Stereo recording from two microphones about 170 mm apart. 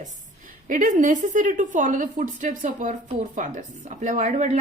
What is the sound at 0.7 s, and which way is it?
A woman's voice, 50° right (ahead or behind).